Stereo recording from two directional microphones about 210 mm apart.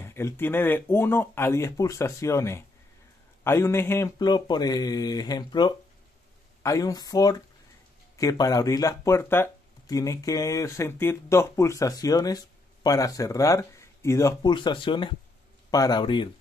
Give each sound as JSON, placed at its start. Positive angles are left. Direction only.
{"t": 0.0, "sound": "speech", "side_deg": 10}